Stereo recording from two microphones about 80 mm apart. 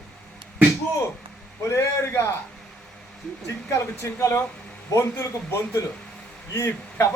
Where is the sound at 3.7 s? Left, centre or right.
Left.